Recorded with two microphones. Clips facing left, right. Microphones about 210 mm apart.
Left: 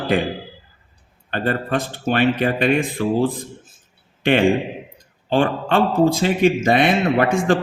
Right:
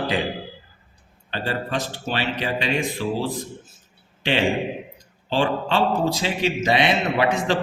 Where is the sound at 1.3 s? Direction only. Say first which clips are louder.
Left 5 dB; 55° left (ahead or behind).